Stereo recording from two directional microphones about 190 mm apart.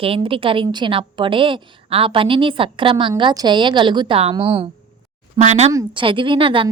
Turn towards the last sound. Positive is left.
turn(degrees=-30)  # may be behind; listen again after turning